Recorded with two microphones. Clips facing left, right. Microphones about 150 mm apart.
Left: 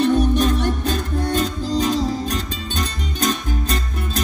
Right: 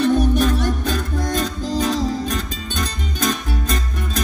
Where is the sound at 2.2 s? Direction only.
35° left (ahead or behind).